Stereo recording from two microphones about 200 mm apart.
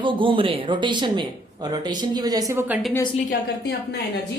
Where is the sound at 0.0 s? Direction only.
25° right (ahead or behind); by 2.9 s 10° right (ahead or behind).